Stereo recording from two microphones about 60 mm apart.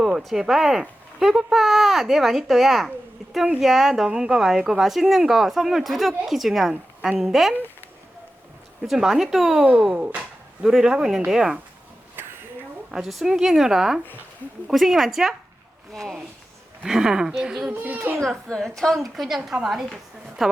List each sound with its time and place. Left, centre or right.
0.2 s speech: centre
8.8 s a woman's voice: centre
9.9 s a sound: centre
10.7 s a woman's voice: centre
12.9 s a woman's voice: centre
16.8 s a woman's voice: centre
17.7 s a child's voice: right
18.2 s a woman's voice: centre